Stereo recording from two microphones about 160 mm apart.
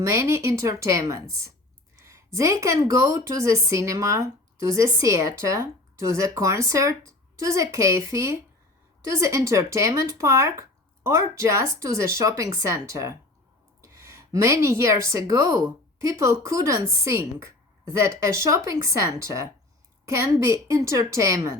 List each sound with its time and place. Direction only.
0.0 s a woman's voice: 20° right (ahead or behind)